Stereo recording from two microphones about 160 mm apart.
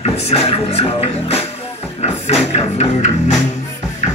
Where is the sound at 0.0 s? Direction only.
40° left (ahead or behind).